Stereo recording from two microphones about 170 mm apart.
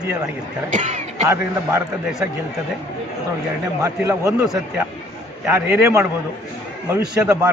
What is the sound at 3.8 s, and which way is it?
Speech, 20° right (ahead or behind).